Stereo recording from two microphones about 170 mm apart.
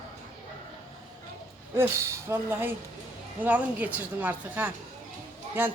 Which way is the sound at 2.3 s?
10° right (ahead or behind).